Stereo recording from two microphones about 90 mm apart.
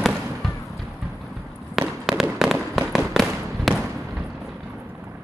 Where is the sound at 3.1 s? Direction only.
Centre (ahead or behind).